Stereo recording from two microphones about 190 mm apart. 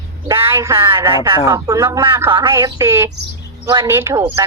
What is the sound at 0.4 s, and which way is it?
Speech, 10° right (ahead or behind).